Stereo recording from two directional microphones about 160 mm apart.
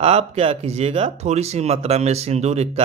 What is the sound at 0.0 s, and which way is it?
Speech, 40° right (ahead or behind).